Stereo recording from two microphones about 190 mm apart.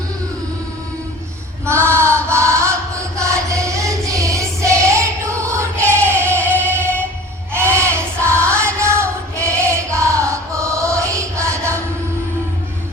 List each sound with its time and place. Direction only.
1.6 s female singing: 15° right (ahead or behind)
2.3 s music: 15° right (ahead or behind)
5.5 s choir: 15° right (ahead or behind)
6.3 s music: 10° left (ahead or behind)
6.7 s music: 10° right (ahead or behind)
7.5 s a sound: 15° right (ahead or behind)
8.4 s music: 15° right (ahead or behind)